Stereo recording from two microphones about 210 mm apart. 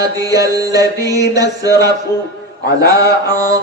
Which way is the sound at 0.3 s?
15° right (ahead or behind).